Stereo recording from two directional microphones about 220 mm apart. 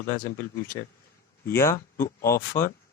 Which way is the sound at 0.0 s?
40° left (ahead or behind).